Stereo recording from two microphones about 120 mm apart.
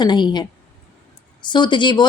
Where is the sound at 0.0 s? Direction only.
35° left (ahead or behind).